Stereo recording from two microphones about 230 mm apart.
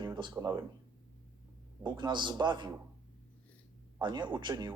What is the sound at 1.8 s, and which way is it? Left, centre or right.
Speech, centre.